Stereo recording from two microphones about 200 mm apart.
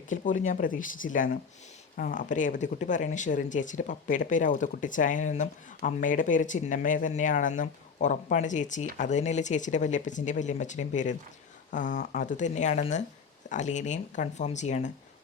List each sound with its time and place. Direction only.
0.1 s speech: 40° left (ahead or behind)